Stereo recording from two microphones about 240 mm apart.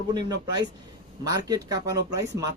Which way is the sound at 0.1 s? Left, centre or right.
Centre.